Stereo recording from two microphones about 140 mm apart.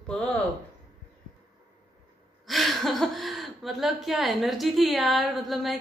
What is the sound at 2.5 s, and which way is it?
A woman's voice, centre (ahead or behind).